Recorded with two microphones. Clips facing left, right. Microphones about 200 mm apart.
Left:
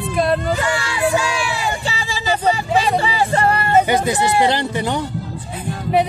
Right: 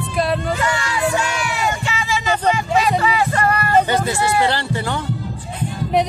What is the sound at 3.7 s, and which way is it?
Speech, 15° left (ahead or behind).